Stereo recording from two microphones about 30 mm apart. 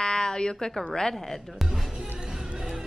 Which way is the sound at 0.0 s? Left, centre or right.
Left.